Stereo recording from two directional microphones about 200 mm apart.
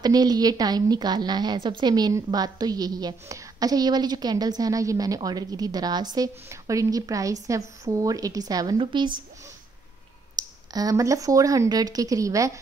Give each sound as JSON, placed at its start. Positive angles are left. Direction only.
{"t": 0.0, "sound": "a woman's voice", "side_deg": -20}
{"t": 10.3, "sound": "speech", "side_deg": -20}